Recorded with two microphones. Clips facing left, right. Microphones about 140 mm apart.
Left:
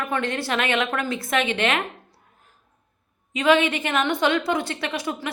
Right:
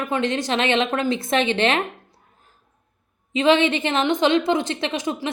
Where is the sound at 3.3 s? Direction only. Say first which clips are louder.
Right 2 dB; 25° right (ahead or behind).